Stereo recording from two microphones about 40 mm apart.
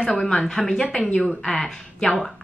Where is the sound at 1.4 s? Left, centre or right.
Centre.